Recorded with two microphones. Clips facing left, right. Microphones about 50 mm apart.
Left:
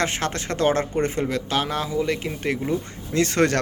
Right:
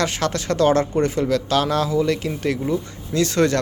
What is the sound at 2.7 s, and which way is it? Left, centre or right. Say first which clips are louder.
Speech: right 2 dB; left.